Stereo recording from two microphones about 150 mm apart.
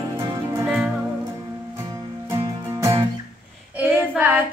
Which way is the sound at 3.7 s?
10° right (ahead or behind).